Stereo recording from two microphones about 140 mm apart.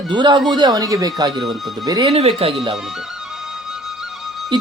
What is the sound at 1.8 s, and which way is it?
Speech, 25° right (ahead or behind).